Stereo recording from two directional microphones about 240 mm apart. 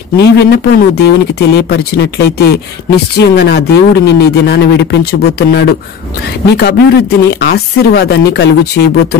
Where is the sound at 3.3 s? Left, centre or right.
Left.